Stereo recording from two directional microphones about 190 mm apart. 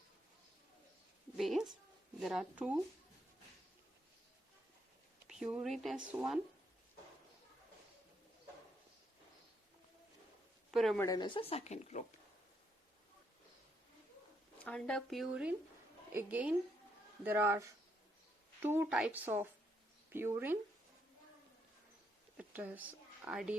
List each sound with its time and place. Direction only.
1.4 s speech: centre (ahead or behind)
5.3 s speech: 5° right (ahead or behind)
10.7 s speech: centre (ahead or behind)
11.0 s speech: 20° left (ahead or behind); by 12.0 s 40° left (ahead or behind)
14.6 s speech: 5° left (ahead or behind); by 20.6 s 10° right (ahead or behind)
22.4 s speech: 10° right (ahead or behind)